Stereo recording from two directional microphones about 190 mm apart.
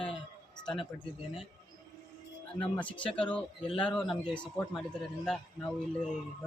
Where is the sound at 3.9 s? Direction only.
Centre (ahead or behind).